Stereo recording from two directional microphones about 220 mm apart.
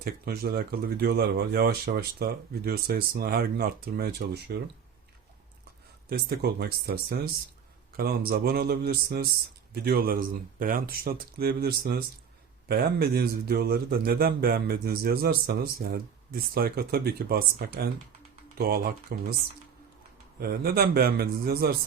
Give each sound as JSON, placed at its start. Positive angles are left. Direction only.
{"t": 0.0, "sound": "a man's voice", "side_deg": -45}
{"t": 6.1, "sound": "a man's voice", "side_deg": -45}
{"t": 20.4, "sound": "a man's voice", "side_deg": -45}